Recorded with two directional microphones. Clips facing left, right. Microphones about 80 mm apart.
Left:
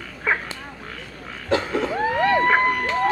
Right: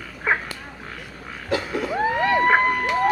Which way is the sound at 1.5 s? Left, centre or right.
Left.